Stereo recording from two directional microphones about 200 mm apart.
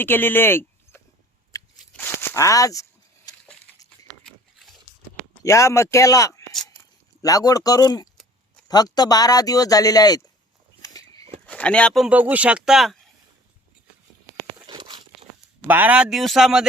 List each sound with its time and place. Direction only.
0.0 s speech: 10° left (ahead or behind)
1.8 s a sound: 10° left (ahead or behind)
4.3 s pig: centre (ahead or behind)
5.4 s speech: 15° left (ahead or behind)
10.8 s a sound: 20° left (ahead or behind)
11.4 s speech: 5° left (ahead or behind)
14.7 s crumpling: 20° right (ahead or behind)
15.6 s speech: 10° right (ahead or behind)